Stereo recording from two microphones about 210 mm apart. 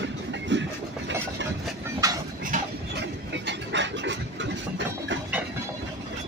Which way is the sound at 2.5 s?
35° right (ahead or behind).